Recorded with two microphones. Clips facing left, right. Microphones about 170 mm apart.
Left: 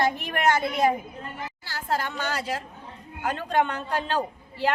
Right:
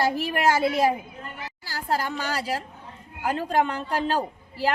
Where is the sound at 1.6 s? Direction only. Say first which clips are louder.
Right 2 dB; 35° right (ahead or behind).